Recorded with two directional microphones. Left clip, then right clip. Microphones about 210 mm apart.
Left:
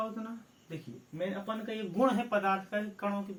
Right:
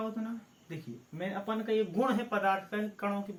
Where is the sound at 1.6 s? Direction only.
15° left (ahead or behind).